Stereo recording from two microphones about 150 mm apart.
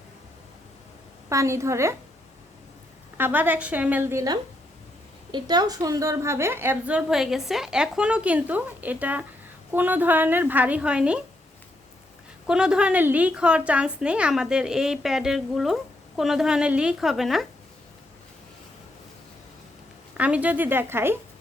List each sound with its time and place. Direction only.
1.3 s a woman's voice: 20° right (ahead or behind)
3.2 s a woman's voice: 15° right (ahead or behind)
12.5 s a woman's voice: 5° right (ahead or behind)
20.1 s a woman's voice: 10° right (ahead or behind)